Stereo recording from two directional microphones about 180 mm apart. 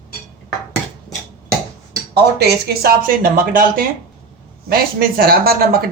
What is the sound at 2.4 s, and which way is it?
Speech, 60° right (ahead or behind).